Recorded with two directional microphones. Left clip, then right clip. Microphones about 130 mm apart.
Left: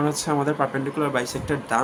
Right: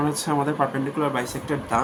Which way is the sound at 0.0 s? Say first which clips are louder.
Even; 25° left (ahead or behind).